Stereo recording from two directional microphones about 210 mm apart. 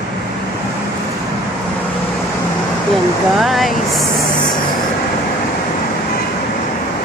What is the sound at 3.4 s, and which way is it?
Vehicle, centre (ahead or behind).